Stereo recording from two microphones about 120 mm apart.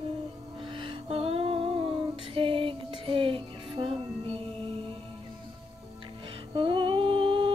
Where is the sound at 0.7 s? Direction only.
50° right (ahead or behind).